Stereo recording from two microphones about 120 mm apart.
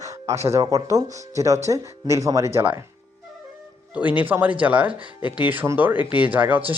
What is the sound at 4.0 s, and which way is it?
Speech, 15° right (ahead or behind).